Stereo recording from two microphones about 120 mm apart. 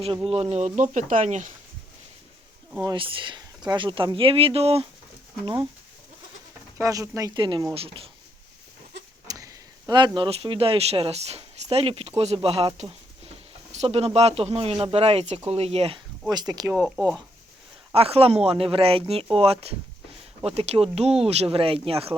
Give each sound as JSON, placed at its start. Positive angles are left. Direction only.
{"t": 0.3, "sound": "speech", "side_deg": -60}
{"t": 2.8, "sound": "speech", "side_deg": -45}
{"t": 6.7, "sound": "speech", "side_deg": -25}
{"t": 7.3, "sound": "speech", "side_deg": -40}
{"t": 7.7, "sound": "speech", "side_deg": -50}
{"t": 9.2, "sound": "speech", "side_deg": -30}
{"t": 16.3, "sound": "speech", "side_deg": -35}
{"t": 16.7, "sound": "speech", "side_deg": -5}
{"t": 17.9, "sound": "speech", "side_deg": -55}